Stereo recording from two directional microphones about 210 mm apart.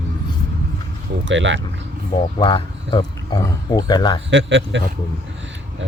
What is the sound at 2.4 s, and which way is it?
Speech, 25° left (ahead or behind).